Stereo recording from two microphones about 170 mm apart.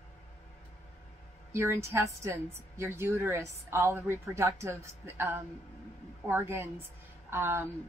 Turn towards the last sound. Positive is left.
turn(degrees=-15)  # may be behind; listen again after turning